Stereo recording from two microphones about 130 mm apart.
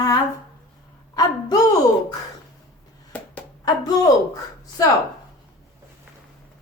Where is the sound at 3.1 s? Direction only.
10° left (ahead or behind).